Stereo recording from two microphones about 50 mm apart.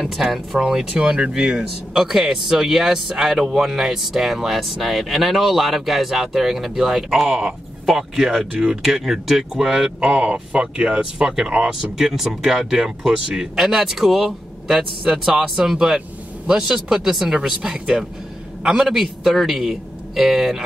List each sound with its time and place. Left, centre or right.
0.0 s a man's voice: centre
9.9 s speech: centre
17.6 s a man's voice: centre
18.9 s a man's voice: centre